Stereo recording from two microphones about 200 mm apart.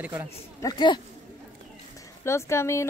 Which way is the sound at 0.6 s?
20° left (ahead or behind).